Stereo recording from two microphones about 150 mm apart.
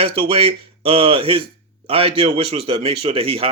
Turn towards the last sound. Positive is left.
turn(degrees=-40)  # may be behind; listen again after turning